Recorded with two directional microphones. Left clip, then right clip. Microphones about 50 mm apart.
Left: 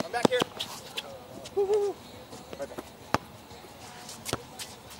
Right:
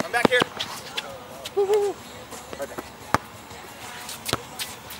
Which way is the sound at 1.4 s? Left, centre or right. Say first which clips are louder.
Right 5 dB; centre.